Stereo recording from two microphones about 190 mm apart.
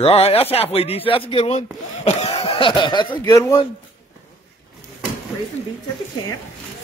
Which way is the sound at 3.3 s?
15° left (ahead or behind).